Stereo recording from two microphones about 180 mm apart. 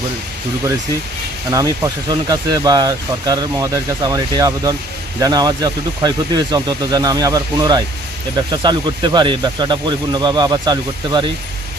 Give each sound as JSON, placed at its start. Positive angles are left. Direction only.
{"t": 1.5, "sound": "speech", "side_deg": -20}